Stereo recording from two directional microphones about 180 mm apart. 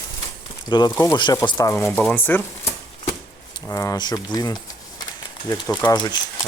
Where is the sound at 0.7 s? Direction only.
20° left (ahead or behind).